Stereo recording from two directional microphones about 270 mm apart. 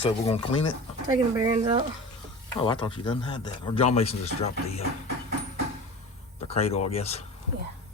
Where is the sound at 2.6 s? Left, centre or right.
Centre.